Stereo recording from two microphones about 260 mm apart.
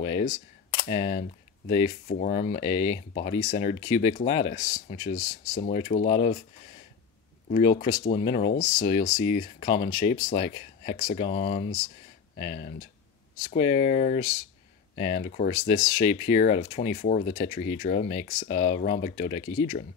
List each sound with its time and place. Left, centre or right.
0.0 s speech: left
7.4 s speech: left
13.5 s speech: left
15.2 s speech: left